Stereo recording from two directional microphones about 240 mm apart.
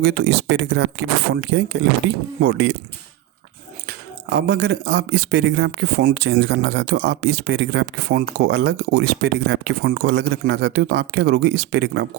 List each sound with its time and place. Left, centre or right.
0.0 s speech: right
3.8 s speech: right